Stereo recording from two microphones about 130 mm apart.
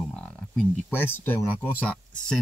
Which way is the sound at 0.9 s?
15° left (ahead or behind).